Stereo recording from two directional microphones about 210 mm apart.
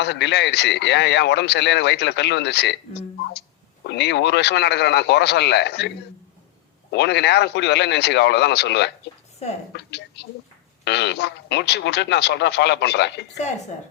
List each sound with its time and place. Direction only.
0.0 s a man's voice: 55° left (ahead or behind)
6.9 s a man's voice: 55° left (ahead or behind)
9.4 s a woman's voice: 30° left (ahead or behind)
9.7 s a woman's voice: 55° left (ahead or behind)